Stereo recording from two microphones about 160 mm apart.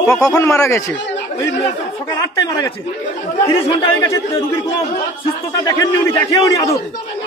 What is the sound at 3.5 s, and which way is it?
Speech, 35° left (ahead or behind).